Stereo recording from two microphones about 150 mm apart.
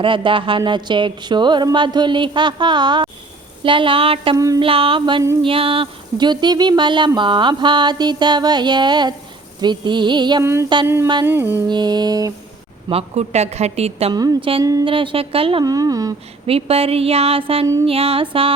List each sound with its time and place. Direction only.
0.0 s speech: 35° right (ahead or behind)
4.4 s speech: 20° right (ahead or behind)
4.6 s speech: 35° right (ahead or behind)
10.4 s music: 15° right (ahead or behind)
11.7 s speech: 30° right (ahead or behind)
12.9 s speech: 45° right (ahead or behind)
14.1 s speech: 25° right (ahead or behind)
14.8 s speech: 35° right (ahead or behind)
15.6 s speech: 25° right (ahead or behind)
16.5 s speech: 40° right (ahead or behind)